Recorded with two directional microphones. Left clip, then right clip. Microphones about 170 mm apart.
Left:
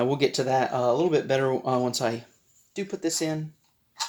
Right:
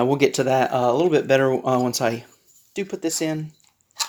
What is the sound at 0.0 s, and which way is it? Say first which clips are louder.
Speech: right 5 dB; 40° right (ahead or behind).